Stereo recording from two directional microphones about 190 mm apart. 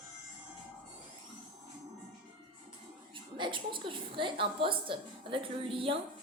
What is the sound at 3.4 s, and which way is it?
A woman's voice, 25° right (ahead or behind).